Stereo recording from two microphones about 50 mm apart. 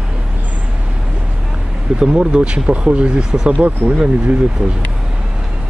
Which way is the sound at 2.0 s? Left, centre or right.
Centre.